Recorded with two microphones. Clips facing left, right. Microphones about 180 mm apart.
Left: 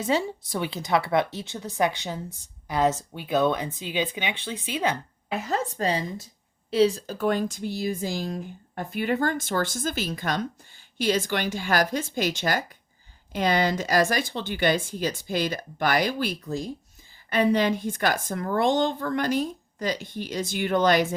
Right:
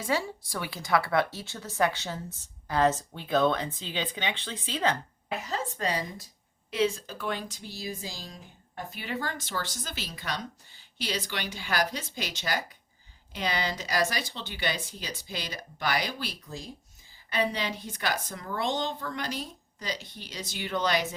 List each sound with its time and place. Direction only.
0.0 s a woman's voice: 20° left (ahead or behind)
5.7 s a woman's voice: 30° left (ahead or behind); by 21.1 s 50° left (ahead or behind)